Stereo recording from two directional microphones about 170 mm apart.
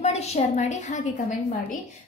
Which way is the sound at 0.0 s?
40° left (ahead or behind).